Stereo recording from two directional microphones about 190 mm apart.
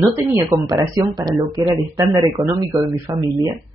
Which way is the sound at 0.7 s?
20° right (ahead or behind).